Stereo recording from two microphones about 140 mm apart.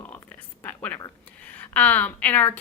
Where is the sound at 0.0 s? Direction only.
10° left (ahead or behind).